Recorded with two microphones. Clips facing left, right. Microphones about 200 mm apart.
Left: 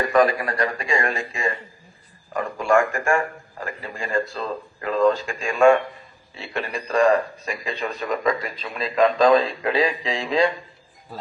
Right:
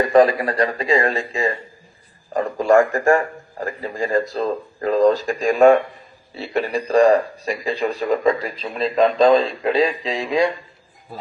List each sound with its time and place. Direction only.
0.0 s a man's voice: 30° right (ahead or behind)